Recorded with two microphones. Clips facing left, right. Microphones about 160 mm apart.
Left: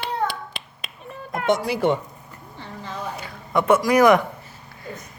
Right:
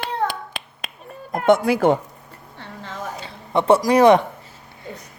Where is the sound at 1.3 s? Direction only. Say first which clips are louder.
Right 5 dB; 50° right (ahead or behind).